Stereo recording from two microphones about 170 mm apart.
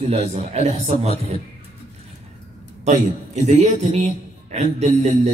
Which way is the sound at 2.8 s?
45° right (ahead or behind).